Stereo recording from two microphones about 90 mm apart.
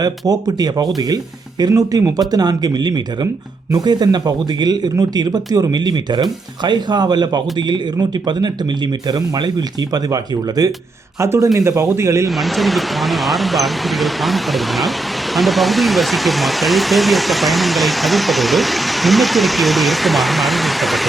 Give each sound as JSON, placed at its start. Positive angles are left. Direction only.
{"t": 0.0, "sound": "speech", "side_deg": -45}
{"t": 9.0, "sound": "speech", "side_deg": -50}
{"t": 11.2, "sound": "speech", "side_deg": -35}
{"t": 12.4, "sound": "speech", "side_deg": 0}